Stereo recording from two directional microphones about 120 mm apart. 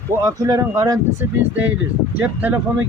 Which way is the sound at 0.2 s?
30° right (ahead or behind).